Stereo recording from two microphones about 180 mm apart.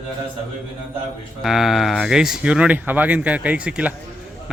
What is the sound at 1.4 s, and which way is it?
Speech, centre (ahead or behind).